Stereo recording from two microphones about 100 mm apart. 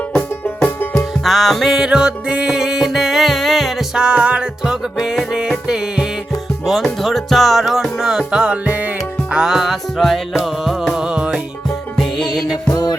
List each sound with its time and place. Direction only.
0.4 s music: 20° left (ahead or behind)
1.2 s music: centre (ahead or behind)
11.9 s music: centre (ahead or behind)
12.7 s music: 40° left (ahead or behind)